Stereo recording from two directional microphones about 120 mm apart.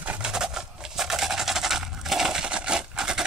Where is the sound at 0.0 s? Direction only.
10° right (ahead or behind).